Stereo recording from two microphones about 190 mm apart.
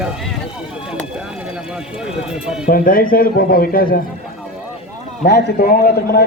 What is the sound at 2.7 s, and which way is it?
A man's voice, 50° left (ahead or behind).